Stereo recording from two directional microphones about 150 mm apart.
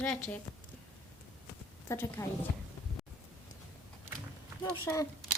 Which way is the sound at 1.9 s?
20° left (ahead or behind).